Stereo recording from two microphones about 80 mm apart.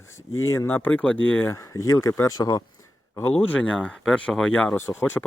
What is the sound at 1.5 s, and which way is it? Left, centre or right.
Speech, left.